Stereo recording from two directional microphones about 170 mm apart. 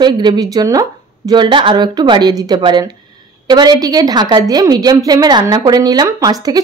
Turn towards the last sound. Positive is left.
turn(degrees=-20)  # may be behind; listen again after turning